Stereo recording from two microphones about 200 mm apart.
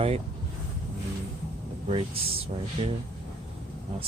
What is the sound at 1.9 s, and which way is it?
Speech, 30° right (ahead or behind).